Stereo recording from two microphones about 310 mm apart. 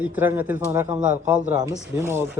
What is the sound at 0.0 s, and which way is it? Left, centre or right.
Speech, centre.